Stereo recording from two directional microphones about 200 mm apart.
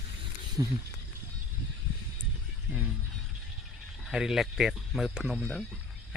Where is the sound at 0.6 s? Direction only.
15° right (ahead or behind).